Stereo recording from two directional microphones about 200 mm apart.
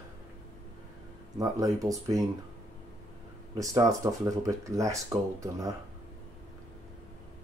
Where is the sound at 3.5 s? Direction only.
15° right (ahead or behind).